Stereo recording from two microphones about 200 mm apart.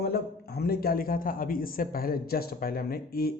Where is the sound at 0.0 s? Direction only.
50° left (ahead or behind).